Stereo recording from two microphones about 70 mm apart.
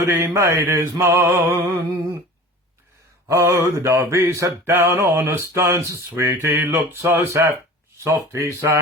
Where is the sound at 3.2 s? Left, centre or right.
Right.